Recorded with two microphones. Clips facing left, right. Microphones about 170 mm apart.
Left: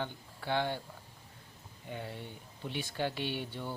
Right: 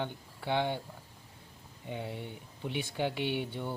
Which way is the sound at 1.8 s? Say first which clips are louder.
Right 3 dB; 15° right (ahead or behind).